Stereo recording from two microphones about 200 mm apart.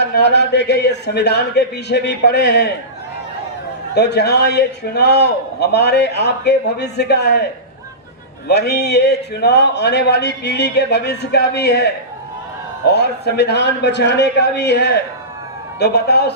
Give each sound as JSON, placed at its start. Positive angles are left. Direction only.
{"t": 0.0, "sound": "a man's voice", "side_deg": 55}
{"t": 3.9, "sound": "a man's voice", "side_deg": 55}
{"t": 8.4, "sound": "a man's voice", "side_deg": 55}